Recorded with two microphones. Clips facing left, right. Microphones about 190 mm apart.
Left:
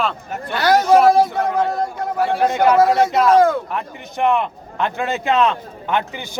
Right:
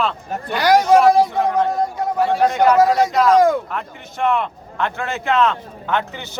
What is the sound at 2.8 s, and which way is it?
Speech, 15° right (ahead or behind).